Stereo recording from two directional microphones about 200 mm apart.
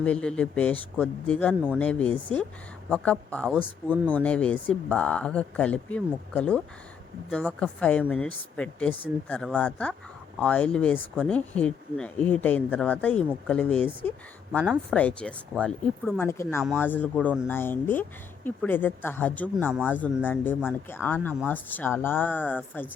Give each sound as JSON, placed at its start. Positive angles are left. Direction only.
{"t": 0.0, "sound": "speech", "side_deg": 5}